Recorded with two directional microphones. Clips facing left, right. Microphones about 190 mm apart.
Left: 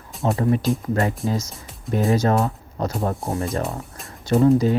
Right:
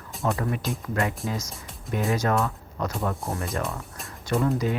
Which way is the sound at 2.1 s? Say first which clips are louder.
Left 4 dB; 30° left (ahead or behind).